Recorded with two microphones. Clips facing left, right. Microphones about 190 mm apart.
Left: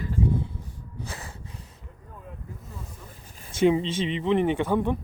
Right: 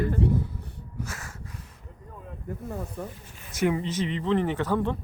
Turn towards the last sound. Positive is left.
turn(degrees=15)  # may be behind; listen again after turning